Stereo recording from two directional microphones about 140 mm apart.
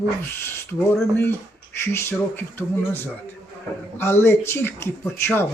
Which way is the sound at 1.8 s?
20° left (ahead or behind).